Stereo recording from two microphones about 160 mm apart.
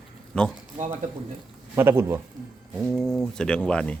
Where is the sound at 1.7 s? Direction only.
15° right (ahead or behind).